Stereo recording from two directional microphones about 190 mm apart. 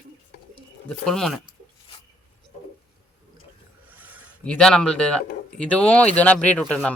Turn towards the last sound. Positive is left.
turn(degrees=5)  # may be behind; listen again after turning